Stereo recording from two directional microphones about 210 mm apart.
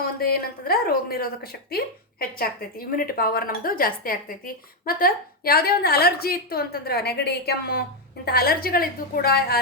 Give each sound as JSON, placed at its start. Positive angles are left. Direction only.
{"t": 0.7, "sound": "a woman's voice", "side_deg": 45}